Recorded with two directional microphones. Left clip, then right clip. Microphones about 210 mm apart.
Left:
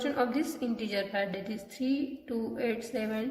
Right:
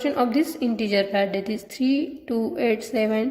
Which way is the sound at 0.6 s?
30° right (ahead or behind).